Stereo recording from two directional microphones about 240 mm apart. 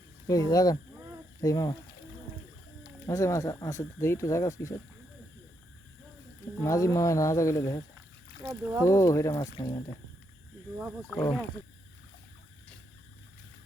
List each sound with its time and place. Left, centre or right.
0.3 s speech: centre
3.1 s speech: centre
6.6 s speech: centre
8.4 s speech: centre
8.8 s speech: centre
11.0 s speech: centre